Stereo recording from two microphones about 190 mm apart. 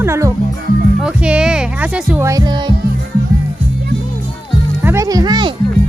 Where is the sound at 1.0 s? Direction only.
5° right (ahead or behind); by 2.7 s 25° right (ahead or behind).